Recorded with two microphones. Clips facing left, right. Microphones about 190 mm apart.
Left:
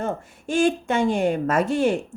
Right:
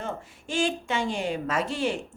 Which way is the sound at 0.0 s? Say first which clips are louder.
Left 7 dB; 50° left (ahead or behind).